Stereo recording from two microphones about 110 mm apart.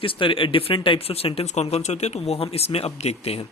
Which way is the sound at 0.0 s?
55° left (ahead or behind).